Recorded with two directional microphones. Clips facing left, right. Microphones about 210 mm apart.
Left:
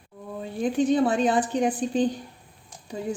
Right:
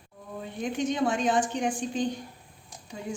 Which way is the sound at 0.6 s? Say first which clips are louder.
Left 6 dB; 35° left (ahead or behind).